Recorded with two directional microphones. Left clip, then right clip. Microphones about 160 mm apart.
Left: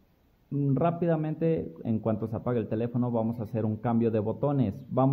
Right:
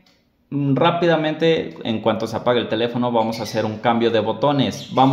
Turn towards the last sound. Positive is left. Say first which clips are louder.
# right 10 dB
turn(degrees=45)  # may be behind; listen again after turning